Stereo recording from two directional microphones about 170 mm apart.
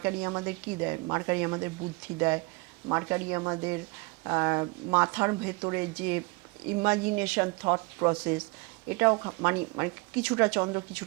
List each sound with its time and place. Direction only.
0.0 s a woman's voice: 20° right (ahead or behind)
7.6 s a woman's voice: 25° right (ahead or behind)
8.9 s speech: 15° right (ahead or behind)